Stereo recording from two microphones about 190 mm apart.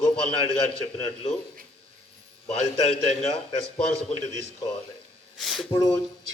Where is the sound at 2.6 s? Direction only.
35° left (ahead or behind).